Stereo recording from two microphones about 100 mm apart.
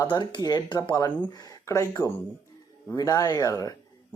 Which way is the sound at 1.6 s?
30° left (ahead or behind).